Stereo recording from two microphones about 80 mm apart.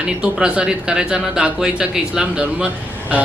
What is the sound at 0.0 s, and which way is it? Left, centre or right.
Speech, centre.